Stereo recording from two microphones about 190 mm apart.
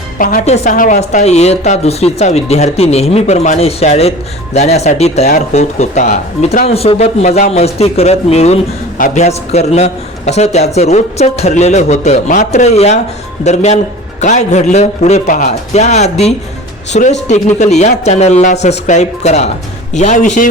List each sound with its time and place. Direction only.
0.2 s a woman's voice: 45° left (ahead or behind)